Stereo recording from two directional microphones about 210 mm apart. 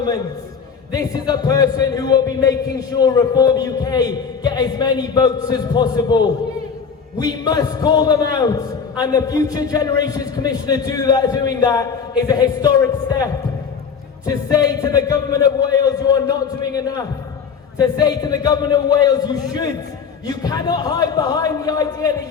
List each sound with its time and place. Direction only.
0.9 s a man's voice: 20° left (ahead or behind)